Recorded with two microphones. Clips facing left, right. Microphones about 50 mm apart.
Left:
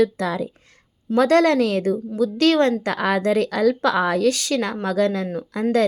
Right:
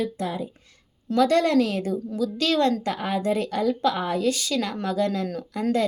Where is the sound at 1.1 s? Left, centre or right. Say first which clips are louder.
Left 4 dB; left.